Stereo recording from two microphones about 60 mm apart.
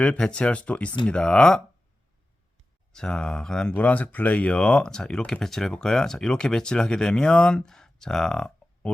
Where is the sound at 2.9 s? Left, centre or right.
Centre.